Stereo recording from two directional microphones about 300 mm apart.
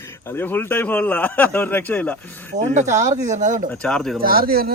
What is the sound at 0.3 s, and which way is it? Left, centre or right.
Speech, centre.